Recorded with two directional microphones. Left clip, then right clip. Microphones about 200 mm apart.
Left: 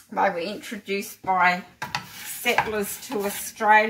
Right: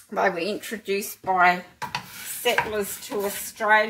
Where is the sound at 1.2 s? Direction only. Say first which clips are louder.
Right 1 dB; 35° right (ahead or behind).